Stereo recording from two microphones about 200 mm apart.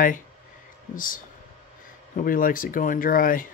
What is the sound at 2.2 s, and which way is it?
Speech, 45° left (ahead or behind).